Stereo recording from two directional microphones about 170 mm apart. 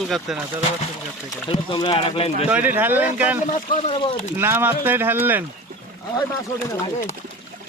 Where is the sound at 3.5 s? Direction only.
50° left (ahead or behind).